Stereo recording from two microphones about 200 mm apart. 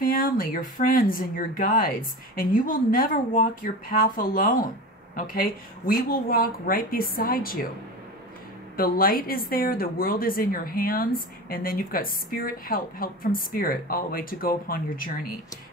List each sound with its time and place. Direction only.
0.0 s speech: 45° left (ahead or behind)
8.7 s speech: 45° left (ahead or behind)